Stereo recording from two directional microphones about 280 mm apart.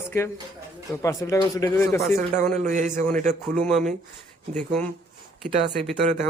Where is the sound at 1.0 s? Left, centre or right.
Centre.